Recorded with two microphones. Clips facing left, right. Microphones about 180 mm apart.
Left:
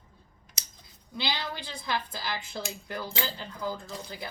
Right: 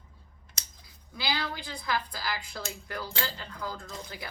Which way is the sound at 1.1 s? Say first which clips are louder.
Even; 25° left (ahead or behind).